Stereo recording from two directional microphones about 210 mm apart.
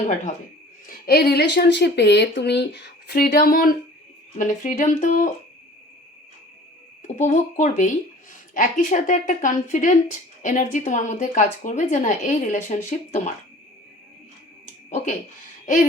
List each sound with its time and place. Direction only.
0.9 s speech: 45° left (ahead or behind)
7.2 s speech: 35° left (ahead or behind)
14.8 s speech: 35° left (ahead or behind)
15.6 s hoot: 40° left (ahead or behind)